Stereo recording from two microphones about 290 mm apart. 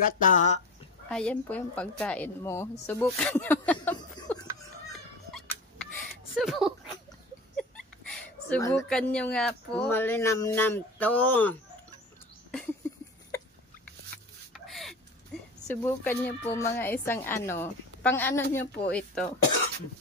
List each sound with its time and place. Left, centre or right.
0.0 s speech: left
1.0 s a woman's voice: centre
4.9 s turkey: centre
6.3 s a woman's voice: centre
12.4 s a sound: centre
14.1 s a sound: centre
15.7 s a woman's voice: centre